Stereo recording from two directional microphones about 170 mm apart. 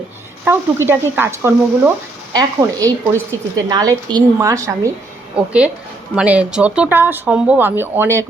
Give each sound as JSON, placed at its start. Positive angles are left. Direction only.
{"t": 0.4, "sound": "a woman's voice", "side_deg": -15}
{"t": 5.4, "sound": "speech", "side_deg": -5}